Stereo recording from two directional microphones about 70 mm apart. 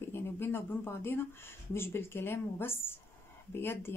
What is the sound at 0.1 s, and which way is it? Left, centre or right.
Speech, left.